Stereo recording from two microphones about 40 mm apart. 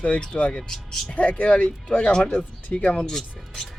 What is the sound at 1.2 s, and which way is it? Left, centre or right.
Speech, left.